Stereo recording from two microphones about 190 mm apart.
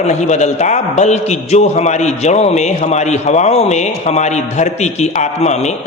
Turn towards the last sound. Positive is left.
turn(degrees=35)  # may be behind; listen again after turning